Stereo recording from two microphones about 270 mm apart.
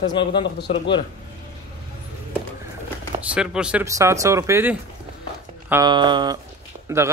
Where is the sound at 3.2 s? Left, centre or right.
Centre.